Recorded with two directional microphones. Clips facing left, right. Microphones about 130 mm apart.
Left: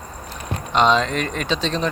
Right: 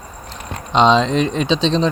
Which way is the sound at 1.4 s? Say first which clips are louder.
Right 6 dB; 25° right (ahead or behind).